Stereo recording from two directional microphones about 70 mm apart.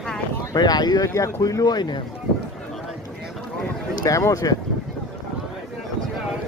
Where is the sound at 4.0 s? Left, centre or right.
Left.